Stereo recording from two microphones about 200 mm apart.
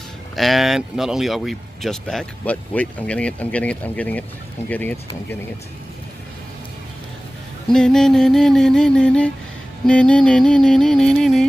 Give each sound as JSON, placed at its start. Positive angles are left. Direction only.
{"t": 0.4, "sound": "speech", "side_deg": 0}
{"t": 7.6, "sound": "speech", "side_deg": 5}